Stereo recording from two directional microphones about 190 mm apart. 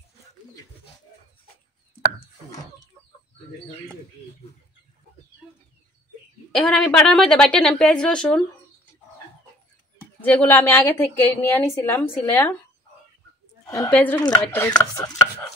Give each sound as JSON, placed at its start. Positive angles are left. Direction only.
{"t": 6.5, "sound": "a woman's voice", "side_deg": 5}
{"t": 10.2, "sound": "a woman's voice", "side_deg": 10}
{"t": 13.7, "sound": "a woman's voice", "side_deg": 15}